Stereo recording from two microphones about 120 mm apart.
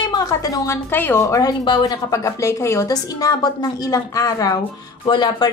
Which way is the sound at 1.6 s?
40° left (ahead or behind).